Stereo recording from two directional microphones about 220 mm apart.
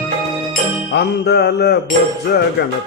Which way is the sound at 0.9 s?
50° left (ahead or behind).